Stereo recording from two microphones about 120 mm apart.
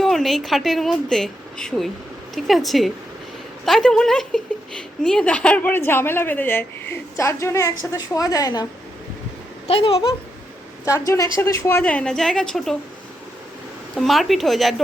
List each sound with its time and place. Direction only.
0.0 s a woman's voice: centre (ahead or behind); by 8.6 s 30° left (ahead or behind)
9.6 s speech: 50° left (ahead or behind)
10.8 s speech: 25° left (ahead or behind)
11.8 s a woman's voice: 10° left (ahead or behind)
13.9 s a woman's voice: centre (ahead or behind)